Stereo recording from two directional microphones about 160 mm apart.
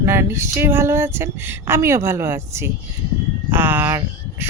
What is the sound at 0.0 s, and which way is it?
Speech, 15° right (ahead or behind).